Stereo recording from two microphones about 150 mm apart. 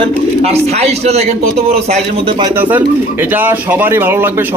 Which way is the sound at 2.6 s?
15° right (ahead or behind).